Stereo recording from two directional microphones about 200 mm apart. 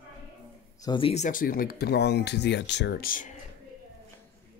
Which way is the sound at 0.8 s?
25° left (ahead or behind).